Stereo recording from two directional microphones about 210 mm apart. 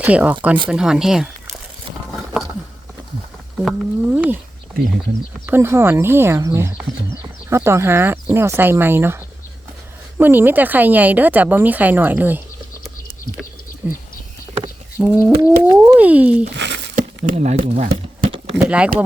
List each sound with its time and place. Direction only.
0.0 s speech: 5° right (ahead or behind)
3.6 s speech: 5° right (ahead or behind)
5.5 s speech: 10° right (ahead or behind)
13.8 s speech: 10° right (ahead or behind)
15.4 s cat: 20° right (ahead or behind)
15.8 s speech: 5° right (ahead or behind)
16.6 s crumpling: 55° right (ahead or behind)
16.9 s a sound: 40° right (ahead or behind)
17.6 s speech: 40° right (ahead or behind)
18.5 s speech: 5° right (ahead or behind)